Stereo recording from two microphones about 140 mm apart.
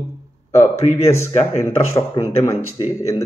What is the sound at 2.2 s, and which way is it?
Speech, 35° left (ahead or behind).